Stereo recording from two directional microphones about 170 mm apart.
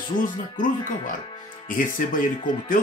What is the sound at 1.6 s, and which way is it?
Speech, 50° left (ahead or behind).